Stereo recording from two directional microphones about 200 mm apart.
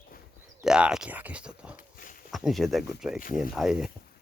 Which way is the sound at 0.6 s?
5° right (ahead or behind).